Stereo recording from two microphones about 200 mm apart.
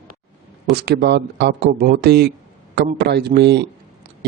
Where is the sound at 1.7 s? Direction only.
45° right (ahead or behind).